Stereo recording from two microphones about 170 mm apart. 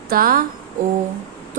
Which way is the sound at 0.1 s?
60° right (ahead or behind).